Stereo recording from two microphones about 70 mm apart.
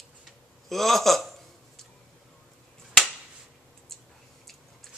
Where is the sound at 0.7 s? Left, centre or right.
Centre.